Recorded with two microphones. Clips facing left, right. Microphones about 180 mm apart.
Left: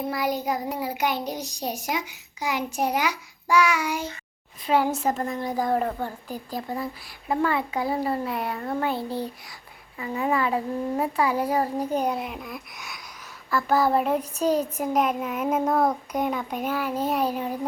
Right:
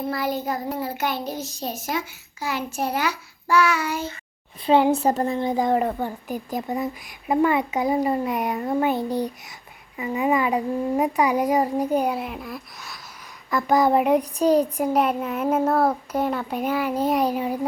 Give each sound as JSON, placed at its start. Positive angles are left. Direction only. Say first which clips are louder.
{"t": 0.1, "sound": "a child's voice", "louder": "even", "side_deg": 15}
{"t": 4.6, "sound": "speech", "louder": "right 5 dB", "side_deg": -25}
{"t": 5.7, "sound": "speech", "louder": "right 3 dB", "side_deg": -10}
{"t": 13.5, "sound": "speech", "louder": "right 3 dB", "side_deg": -15}
{"t": 15.2, "sound": "a child's voice", "louder": "right 2 dB", "side_deg": 5}
{"t": 15.6, "sound": "a child's voice", "louder": "right 2 dB", "side_deg": -5}